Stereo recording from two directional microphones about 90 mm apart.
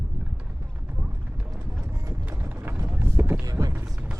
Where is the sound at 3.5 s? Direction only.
30° right (ahead or behind).